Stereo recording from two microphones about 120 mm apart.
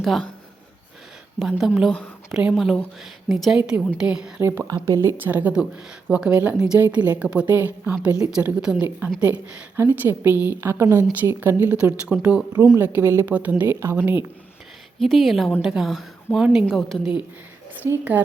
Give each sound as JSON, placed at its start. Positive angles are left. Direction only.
{"t": 0.0, "sound": "speech", "side_deg": 0}
{"t": 1.4, "sound": "speech", "side_deg": -5}
{"t": 4.4, "sound": "speech", "side_deg": -20}
{"t": 14.9, "sound": "speech", "side_deg": 0}
{"t": 17.8, "sound": "speech", "side_deg": -15}